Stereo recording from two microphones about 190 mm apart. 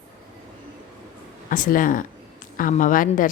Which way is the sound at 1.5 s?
45° left (ahead or behind).